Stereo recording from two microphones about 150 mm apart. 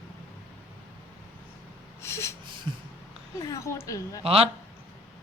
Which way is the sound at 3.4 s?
20° left (ahead or behind).